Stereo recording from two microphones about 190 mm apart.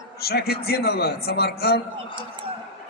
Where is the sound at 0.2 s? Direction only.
55° left (ahead or behind).